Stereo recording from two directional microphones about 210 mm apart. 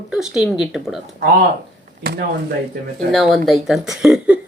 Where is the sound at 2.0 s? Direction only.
45° right (ahead or behind).